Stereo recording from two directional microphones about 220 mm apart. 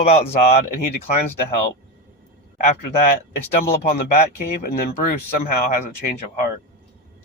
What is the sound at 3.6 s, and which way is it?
Speech, 45° left (ahead or behind).